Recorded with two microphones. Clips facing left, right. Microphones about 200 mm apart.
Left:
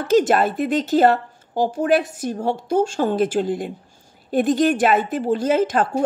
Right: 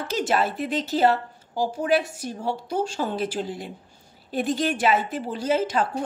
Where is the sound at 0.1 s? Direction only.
50° left (ahead or behind).